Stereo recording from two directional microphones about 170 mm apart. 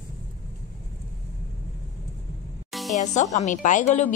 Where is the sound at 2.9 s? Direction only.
45° left (ahead or behind).